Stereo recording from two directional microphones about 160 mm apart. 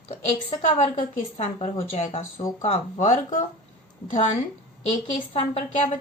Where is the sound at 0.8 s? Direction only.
50° left (ahead or behind).